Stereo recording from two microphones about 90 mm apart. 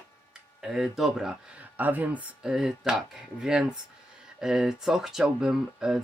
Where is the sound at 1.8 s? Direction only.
20° right (ahead or behind).